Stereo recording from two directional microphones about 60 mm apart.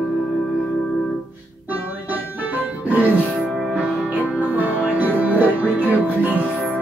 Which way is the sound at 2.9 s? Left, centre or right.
Right.